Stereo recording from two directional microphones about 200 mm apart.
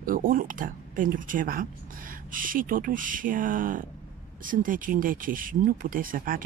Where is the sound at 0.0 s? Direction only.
45° right (ahead or behind).